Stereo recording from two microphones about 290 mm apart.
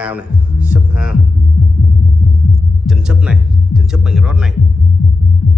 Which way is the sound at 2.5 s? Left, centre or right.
Centre.